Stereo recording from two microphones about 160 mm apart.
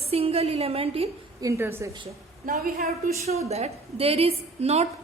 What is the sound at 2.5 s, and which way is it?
Speech, 60° right (ahead or behind).